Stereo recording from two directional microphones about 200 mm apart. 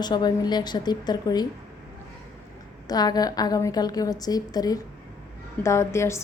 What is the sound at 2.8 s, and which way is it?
A woman's voice, 20° left (ahead or behind).